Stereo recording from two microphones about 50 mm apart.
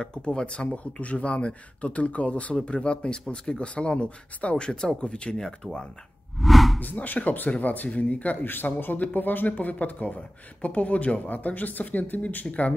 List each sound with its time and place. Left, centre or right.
0.0 s speech: centre
6.4 s a sound: centre
6.8 s speech: left